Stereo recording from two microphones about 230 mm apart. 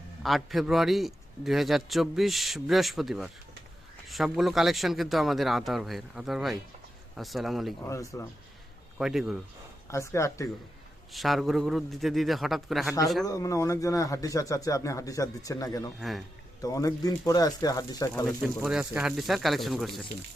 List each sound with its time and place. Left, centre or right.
0.2 s a man's voice: centre
7.9 s speech: centre
9.0 s a man's voice: centre
9.9 s speech: centre
11.1 s a man's voice: centre
13.2 s speech: centre
16.0 s a man's voice: centre
16.6 s speech: centre
18.3 s a man's voice: centre